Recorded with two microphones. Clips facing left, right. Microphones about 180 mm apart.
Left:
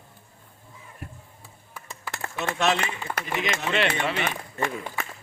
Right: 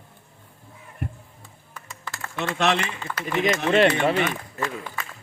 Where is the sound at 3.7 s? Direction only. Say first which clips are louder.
Right 7 dB; 45° right (ahead or behind).